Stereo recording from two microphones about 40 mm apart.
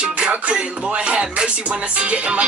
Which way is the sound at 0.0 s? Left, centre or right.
Right.